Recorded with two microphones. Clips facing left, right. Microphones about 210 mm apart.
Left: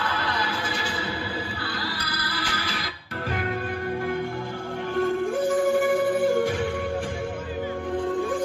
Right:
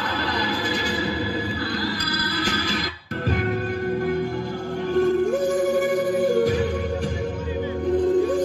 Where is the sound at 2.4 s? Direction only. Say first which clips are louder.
Right 7 dB; 40° right (ahead or behind).